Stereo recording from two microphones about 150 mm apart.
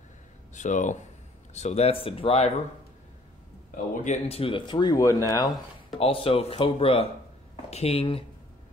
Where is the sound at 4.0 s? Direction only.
50° left (ahead or behind); by 5.5 s 25° left (ahead or behind).